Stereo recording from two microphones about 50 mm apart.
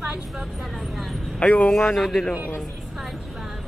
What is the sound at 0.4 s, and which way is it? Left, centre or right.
Vehicle, centre.